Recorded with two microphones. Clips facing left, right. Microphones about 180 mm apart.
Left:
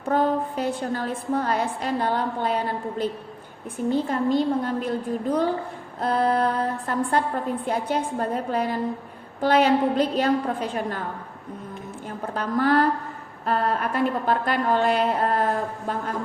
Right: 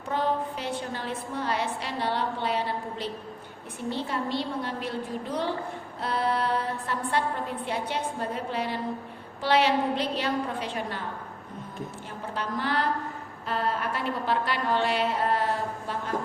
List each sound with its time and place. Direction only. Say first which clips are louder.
0.1 s a woman's voice: left 5 dB; 45° left (ahead or behind)
12.3 s a woman's voice: left 8 dB; 50° left (ahead or behind)